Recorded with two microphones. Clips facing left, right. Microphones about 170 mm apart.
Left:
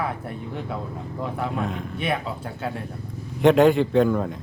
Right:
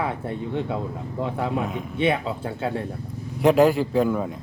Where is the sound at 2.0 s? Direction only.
25° right (ahead or behind).